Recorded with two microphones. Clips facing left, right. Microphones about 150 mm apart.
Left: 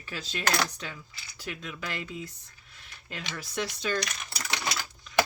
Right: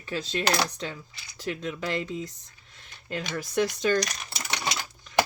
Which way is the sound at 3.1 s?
45° right (ahead or behind).